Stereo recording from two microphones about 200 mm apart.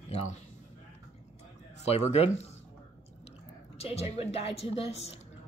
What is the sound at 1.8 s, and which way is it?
Speech, 30° left (ahead or behind).